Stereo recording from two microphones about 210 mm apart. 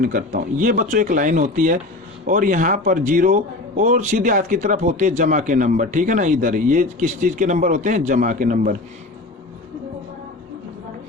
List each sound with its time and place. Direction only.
0.0 s a man's voice: 40° right (ahead or behind)